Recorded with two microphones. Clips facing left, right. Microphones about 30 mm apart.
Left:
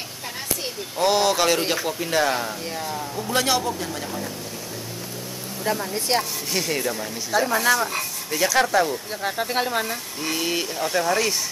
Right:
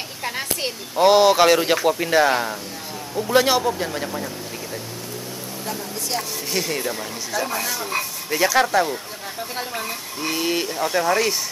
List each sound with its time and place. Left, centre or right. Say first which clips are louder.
0.9 s speech: right 6 dB; centre
5.7 s speech: left 5 dB; left
6.5 s speech: even; centre
7.3 s speech: left 4 dB; centre
7.9 s speech: right 3 dB; centre
9.2 s speech: left 6 dB; left
9.8 s speech: right 1 dB; centre